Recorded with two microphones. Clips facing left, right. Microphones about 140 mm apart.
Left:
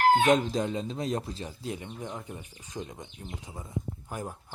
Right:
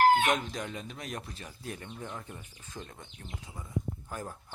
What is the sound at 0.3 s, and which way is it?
Speech, 30° left (ahead or behind).